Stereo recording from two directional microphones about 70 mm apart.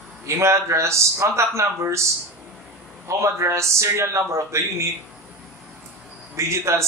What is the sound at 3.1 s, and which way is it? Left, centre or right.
A man's voice, right.